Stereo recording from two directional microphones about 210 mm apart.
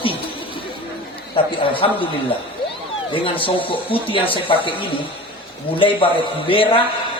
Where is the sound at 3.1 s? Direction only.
25° left (ahead or behind).